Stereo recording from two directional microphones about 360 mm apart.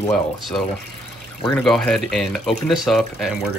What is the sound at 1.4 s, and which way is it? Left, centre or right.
Speech, centre.